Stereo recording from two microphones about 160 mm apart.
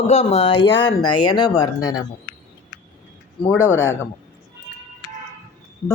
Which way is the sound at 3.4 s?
15° left (ahead or behind).